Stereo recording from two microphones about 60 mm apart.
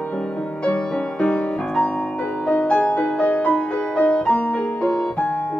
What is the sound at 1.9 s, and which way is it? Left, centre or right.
Music, left.